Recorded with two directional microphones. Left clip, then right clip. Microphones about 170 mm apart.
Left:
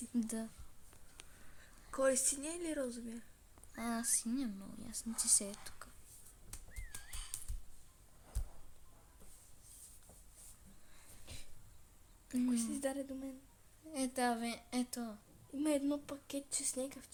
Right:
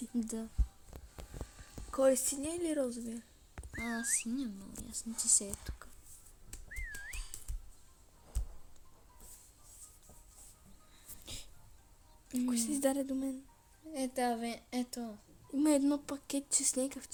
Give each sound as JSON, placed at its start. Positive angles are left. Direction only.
{"t": 0.2, "sound": "a woman's voice", "side_deg": 15}
{"t": 1.9, "sound": "a woman's voice", "side_deg": -25}
{"t": 3.8, "sound": "speech", "side_deg": 20}
{"t": 11.3, "sound": "a sound", "side_deg": -35}
{"t": 12.5, "sound": "a woman's voice", "side_deg": -40}
{"t": 13.9, "sound": "a woman's voice", "side_deg": 20}
{"t": 15.5, "sound": "speech", "side_deg": -40}